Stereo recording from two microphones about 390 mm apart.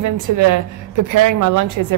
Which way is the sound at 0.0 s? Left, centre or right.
Right.